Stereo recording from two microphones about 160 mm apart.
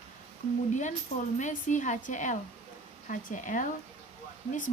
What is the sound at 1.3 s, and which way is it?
Speech, 50° left (ahead or behind).